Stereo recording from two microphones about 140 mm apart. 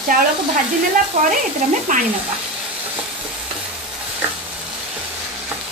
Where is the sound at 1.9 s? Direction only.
70° right (ahead or behind).